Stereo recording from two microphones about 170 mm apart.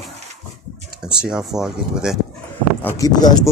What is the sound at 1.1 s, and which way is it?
Speech, 5° right (ahead or behind).